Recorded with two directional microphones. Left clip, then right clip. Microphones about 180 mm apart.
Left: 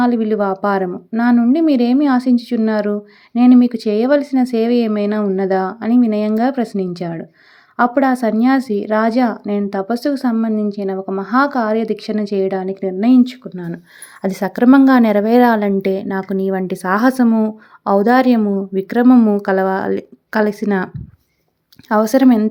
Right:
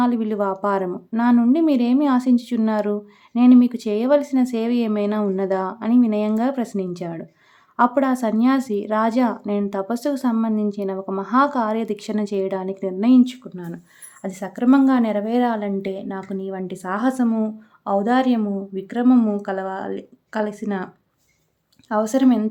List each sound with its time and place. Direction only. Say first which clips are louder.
0.0 s a woman's voice: left 5 dB; 20° left (ahead or behind)
14.2 s a woman's voice: left 10 dB; 40° left (ahead or behind)
19.4 s a woman's voice: left 10 dB; 40° left (ahead or behind)